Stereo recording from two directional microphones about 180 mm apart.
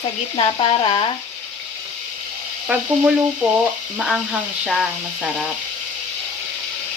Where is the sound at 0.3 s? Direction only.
30° left (ahead or behind).